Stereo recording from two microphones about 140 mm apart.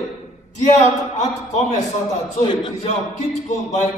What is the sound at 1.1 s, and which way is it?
A man's voice, 55° left (ahead or behind).